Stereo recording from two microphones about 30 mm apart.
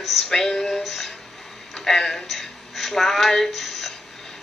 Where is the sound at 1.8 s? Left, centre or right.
Centre.